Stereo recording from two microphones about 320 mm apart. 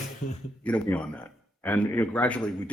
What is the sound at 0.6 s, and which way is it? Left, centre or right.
Speech, centre.